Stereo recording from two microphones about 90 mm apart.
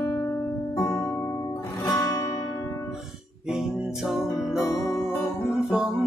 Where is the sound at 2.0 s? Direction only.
35° left (ahead or behind).